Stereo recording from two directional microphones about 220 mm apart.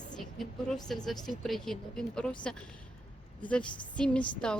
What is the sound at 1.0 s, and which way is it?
Speech, centre (ahead or behind).